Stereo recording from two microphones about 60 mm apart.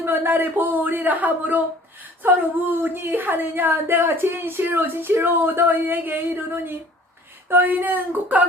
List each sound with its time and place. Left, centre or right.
0.0 s a woman's voice: right